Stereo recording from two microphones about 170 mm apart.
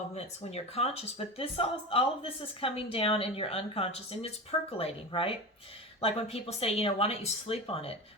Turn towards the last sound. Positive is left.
turn(degrees=35)  # may be behind; listen again after turning